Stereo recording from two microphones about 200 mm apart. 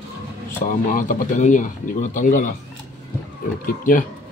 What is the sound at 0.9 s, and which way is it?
Speech, 40° left (ahead or behind).